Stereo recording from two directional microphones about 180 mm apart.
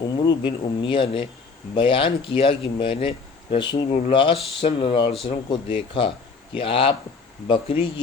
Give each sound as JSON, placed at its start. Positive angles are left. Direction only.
{"t": 0.0, "sound": "speech", "side_deg": 25}